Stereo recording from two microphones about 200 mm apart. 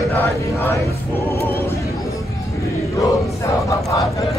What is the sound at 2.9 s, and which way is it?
Crowd, 15° left (ahead or behind).